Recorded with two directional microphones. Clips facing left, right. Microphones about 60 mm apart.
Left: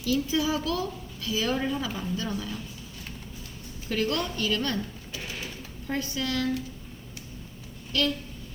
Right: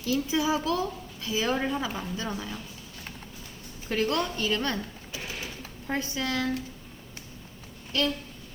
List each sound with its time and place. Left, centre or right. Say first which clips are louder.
0.0 s a woman's voice: even; right
3.8 s a woman's voice: right 1 dB; right
5.9 s a woman's voice: even; right
7.9 s a woman's voice: even; right